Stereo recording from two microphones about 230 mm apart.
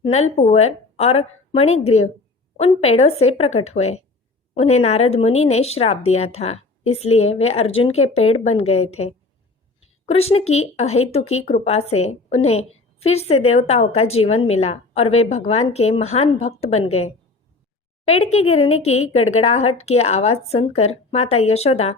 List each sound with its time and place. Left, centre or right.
0.0 s speech: left